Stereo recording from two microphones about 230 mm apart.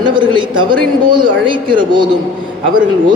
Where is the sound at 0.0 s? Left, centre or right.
Right.